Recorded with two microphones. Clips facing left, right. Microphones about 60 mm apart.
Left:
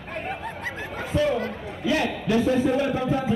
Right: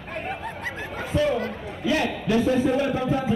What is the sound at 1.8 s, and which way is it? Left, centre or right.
Speech, left.